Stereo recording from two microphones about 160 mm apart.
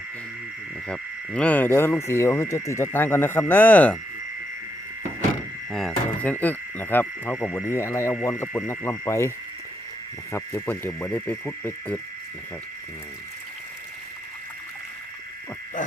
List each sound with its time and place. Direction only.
0.9 s speech: 5° left (ahead or behind)
5.7 s speech: 5° left (ahead or behind)
7.3 s speech: centre (ahead or behind)
7.7 s speech: 15° left (ahead or behind)
10.3 s speech: 15° left (ahead or behind)